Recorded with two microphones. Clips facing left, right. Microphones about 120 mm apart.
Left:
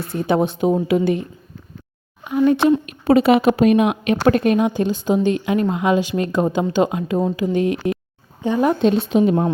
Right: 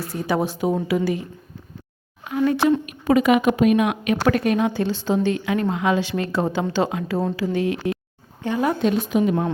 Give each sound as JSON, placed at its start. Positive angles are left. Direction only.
{"t": 0.0, "sound": "a woman's voice", "side_deg": 25}
{"t": 2.3, "sound": "a woman's voice", "side_deg": 20}